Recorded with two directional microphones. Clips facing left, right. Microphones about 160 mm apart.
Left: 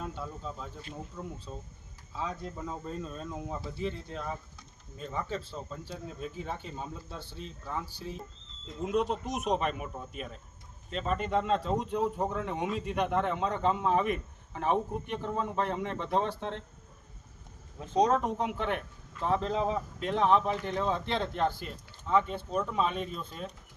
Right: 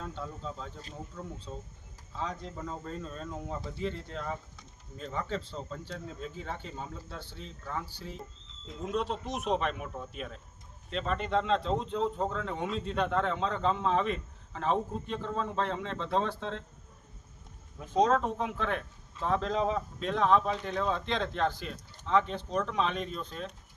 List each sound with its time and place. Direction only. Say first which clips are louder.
0.0 s speech: left 1 dB; 10° left (ahead or behind)
8.6 s speech: left 3 dB; centre (ahead or behind)
18.0 s speech: even; 15° left (ahead or behind)